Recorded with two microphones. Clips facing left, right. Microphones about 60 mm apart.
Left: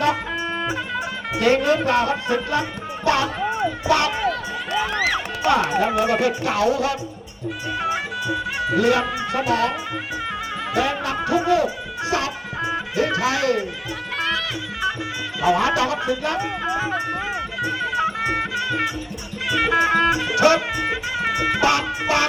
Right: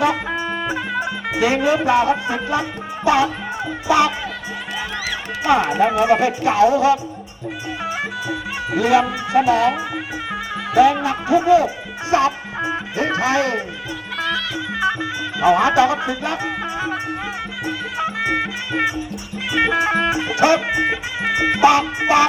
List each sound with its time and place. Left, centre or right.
0.0 s music: centre
1.4 s speech: centre
4.9 s speech: left
5.4 s speech: right
8.7 s speech: centre; by 13.7 s right
15.4 s speech: right
18.3 s music: right